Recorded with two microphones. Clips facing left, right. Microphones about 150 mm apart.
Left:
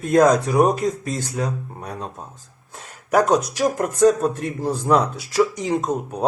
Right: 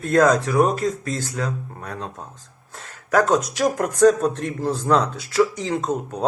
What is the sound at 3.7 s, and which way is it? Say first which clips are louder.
Speech: right 1 dB; centre (ahead or behind).